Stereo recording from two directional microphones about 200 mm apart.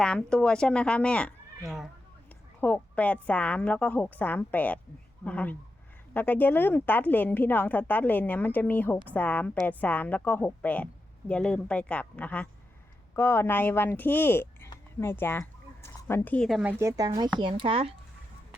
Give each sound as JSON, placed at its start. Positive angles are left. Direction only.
{"t": 0.0, "sound": "a woman's voice", "side_deg": 5}
{"t": 16.7, "sound": "speech", "side_deg": -15}